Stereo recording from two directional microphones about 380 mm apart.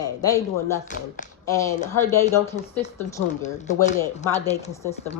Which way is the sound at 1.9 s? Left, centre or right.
Centre.